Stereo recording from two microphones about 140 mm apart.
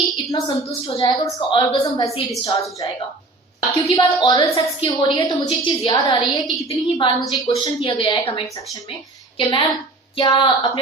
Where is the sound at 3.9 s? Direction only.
30° left (ahead or behind).